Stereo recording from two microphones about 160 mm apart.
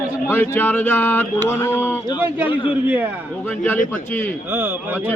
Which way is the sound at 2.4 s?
35° left (ahead or behind).